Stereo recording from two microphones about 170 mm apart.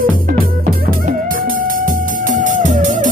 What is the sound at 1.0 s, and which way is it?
Music, 55° right (ahead or behind).